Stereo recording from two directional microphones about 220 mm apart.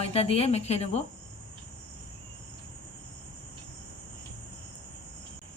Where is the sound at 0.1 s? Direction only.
25° left (ahead or behind).